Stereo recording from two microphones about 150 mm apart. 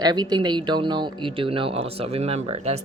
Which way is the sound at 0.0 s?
25° right (ahead or behind).